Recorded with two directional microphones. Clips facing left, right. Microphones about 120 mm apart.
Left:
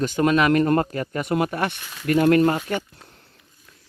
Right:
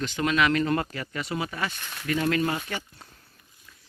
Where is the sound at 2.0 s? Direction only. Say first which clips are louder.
Left 9 dB; 50° left (ahead or behind).